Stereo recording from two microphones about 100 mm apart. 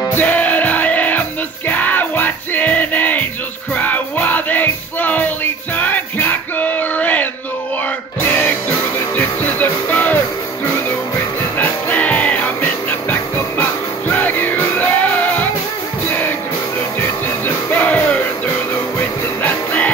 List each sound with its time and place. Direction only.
0.1 s music: 15° left (ahead or behind)
8.3 s music: 20° left (ahead or behind)
11.5 s music: 15° left (ahead or behind)
17.6 s music: 15° left (ahead or behind)
19.4 s music: 15° left (ahead or behind)